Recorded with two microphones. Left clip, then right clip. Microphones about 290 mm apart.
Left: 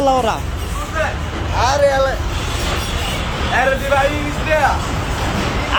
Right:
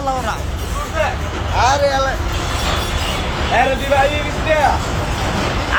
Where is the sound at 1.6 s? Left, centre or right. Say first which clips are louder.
Left 1 dB; left.